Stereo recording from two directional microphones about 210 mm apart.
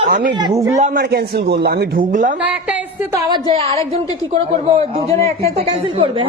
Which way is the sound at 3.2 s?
30° right (ahead or behind).